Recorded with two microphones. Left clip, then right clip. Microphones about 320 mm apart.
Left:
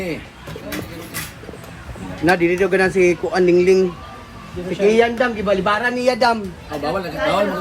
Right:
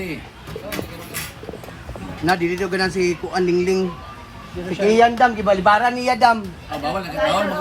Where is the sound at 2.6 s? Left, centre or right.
Centre.